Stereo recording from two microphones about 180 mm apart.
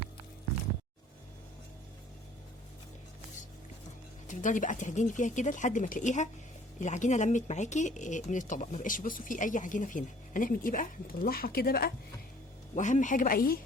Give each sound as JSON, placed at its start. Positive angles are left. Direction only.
{"t": 4.3, "sound": "speech", "side_deg": 45}
{"t": 12.7, "sound": "speech", "side_deg": 45}